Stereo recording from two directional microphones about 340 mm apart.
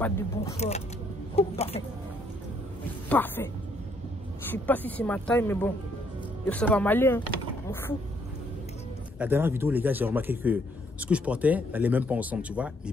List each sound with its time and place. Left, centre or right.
0.6 s speech: centre
3.1 s a man's voice: centre
4.5 s a man's voice: centre
9.2 s a man's voice: centre